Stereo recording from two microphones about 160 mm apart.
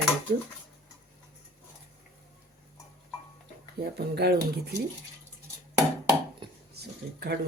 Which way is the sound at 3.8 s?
90° right.